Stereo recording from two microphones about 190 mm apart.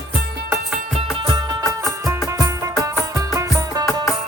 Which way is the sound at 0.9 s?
25° right (ahead or behind).